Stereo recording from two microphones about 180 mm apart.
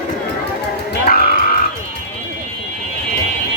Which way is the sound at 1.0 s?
50° left (ahead or behind).